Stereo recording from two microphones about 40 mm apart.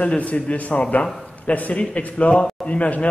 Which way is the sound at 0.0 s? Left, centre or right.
Left.